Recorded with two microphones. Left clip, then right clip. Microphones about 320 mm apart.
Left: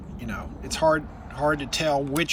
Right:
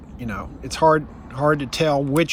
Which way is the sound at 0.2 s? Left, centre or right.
Centre.